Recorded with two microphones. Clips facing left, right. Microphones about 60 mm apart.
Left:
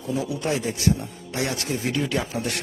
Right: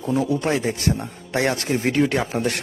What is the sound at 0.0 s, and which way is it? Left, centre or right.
A man's voice, right.